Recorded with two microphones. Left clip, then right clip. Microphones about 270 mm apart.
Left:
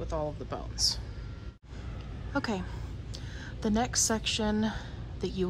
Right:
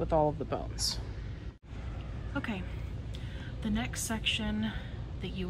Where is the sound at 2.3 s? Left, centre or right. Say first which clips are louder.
Left 5 dB; centre.